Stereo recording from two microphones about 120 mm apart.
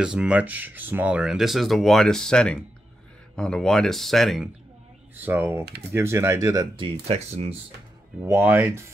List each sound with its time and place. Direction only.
0.0 s speech: 5° right (ahead or behind)
5.1 s speech: 15° right (ahead or behind)
6.8 s speech: 60° right (ahead or behind)
8.2 s speech: 20° right (ahead or behind)